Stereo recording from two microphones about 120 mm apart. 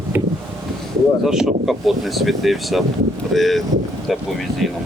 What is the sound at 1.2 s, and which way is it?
Speech, 5° right (ahead or behind).